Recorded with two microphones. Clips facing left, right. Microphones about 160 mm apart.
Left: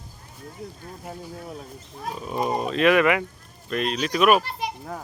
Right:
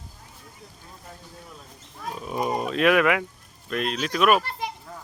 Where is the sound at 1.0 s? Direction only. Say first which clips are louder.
Left 9 dB; 60° left (ahead or behind).